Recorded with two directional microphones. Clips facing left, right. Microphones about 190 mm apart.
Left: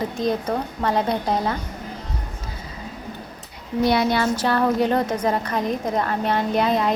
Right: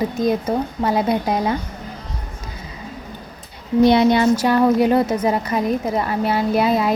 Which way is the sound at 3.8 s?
20° right (ahead or behind).